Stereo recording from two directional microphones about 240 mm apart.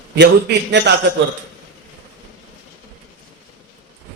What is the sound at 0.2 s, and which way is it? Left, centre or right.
Speech, right.